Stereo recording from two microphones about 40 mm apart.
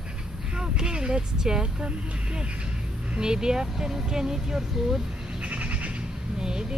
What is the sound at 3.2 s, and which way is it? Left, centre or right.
Speech, centre.